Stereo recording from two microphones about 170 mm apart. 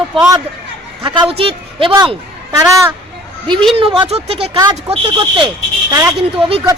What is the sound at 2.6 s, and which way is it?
Speech, 10° right (ahead or behind).